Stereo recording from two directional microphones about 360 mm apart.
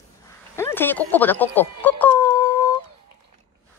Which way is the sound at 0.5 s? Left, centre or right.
Centre.